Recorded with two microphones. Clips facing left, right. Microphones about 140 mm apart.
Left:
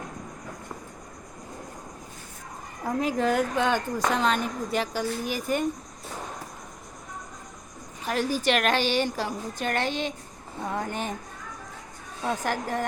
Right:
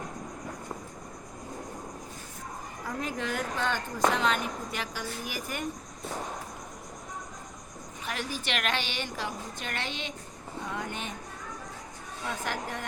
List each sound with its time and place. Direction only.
2.8 s a woman's voice: 40° left (ahead or behind)
8.0 s a woman's voice: 40° left (ahead or behind)
12.2 s a woman's voice: 40° left (ahead or behind)